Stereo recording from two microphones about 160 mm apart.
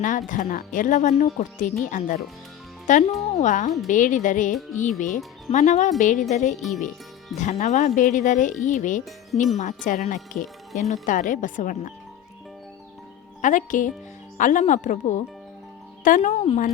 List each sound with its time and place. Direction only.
0.0 s speech: 55° left (ahead or behind)
6.6 s speech: centre (ahead or behind)
7.3 s speech: 50° left (ahead or behind)
13.4 s speech: 55° left (ahead or behind)